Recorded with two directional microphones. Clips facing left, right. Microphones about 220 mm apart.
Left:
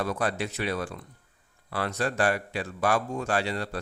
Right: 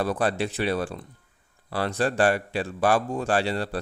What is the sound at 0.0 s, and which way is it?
A man's voice, 30° right (ahead or behind).